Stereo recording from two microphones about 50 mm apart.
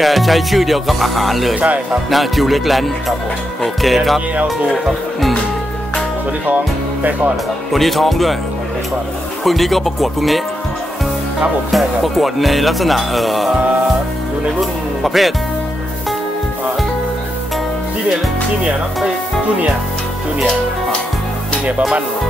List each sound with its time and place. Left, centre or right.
0.0 s speech: centre
1.6 s speech: right
2.0 s speech: centre
6.4 s speech: right
7.7 s speech: centre
9.4 s speech: centre
11.7 s speech: centre
14.6 s speech: centre